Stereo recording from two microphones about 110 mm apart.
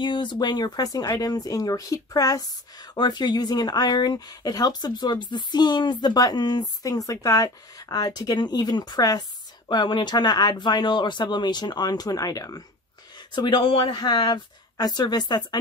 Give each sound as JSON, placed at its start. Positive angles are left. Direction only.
{"t": 0.0, "sound": "speech", "side_deg": 45}
{"t": 13.3, "sound": "speech", "side_deg": 45}